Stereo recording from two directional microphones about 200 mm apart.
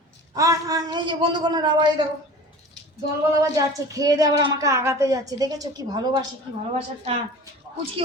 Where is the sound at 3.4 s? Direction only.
15° right (ahead or behind).